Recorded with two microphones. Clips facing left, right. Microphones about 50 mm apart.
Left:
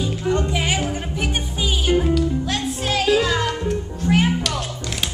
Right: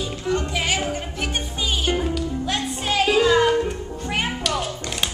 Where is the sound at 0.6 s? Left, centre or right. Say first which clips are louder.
Left 1 dB; centre.